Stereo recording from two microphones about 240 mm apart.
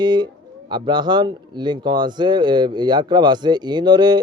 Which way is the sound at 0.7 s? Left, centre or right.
Centre.